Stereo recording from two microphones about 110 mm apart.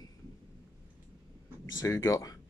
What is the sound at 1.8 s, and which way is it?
Speech, 30° left (ahead or behind).